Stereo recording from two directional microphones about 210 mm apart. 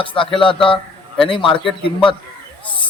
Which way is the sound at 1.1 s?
Centre (ahead or behind).